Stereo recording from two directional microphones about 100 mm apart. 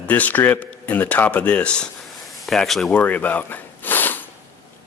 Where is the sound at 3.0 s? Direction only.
15° left (ahead or behind).